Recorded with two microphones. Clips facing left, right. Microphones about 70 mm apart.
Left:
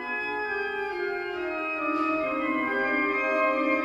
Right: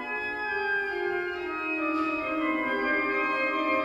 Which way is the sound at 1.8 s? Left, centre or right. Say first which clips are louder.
Left 3 dB; centre.